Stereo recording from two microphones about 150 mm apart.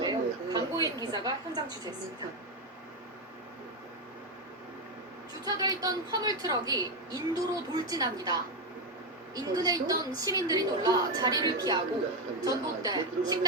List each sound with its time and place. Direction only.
0.0 s a sound: 25° right (ahead or behind)
1.0 s a woman's voice: 25° right (ahead or behind)
5.5 s a woman's voice: 25° right (ahead or behind)